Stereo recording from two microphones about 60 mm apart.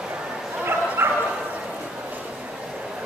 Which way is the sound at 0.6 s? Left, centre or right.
Right.